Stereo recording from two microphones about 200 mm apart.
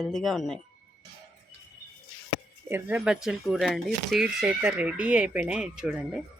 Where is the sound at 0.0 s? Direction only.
Centre (ahead or behind).